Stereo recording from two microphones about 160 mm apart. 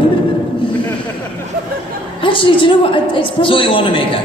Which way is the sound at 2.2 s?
30° left (ahead or behind).